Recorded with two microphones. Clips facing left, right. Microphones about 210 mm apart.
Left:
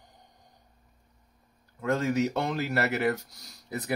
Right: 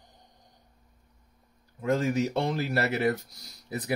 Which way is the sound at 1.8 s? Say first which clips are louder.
Even; 15° right (ahead or behind).